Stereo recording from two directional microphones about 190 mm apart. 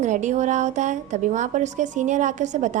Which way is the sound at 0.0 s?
40° right (ahead or behind).